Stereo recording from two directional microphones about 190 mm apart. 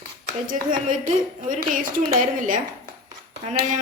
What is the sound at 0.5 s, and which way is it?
Speech, 45° right (ahead or behind).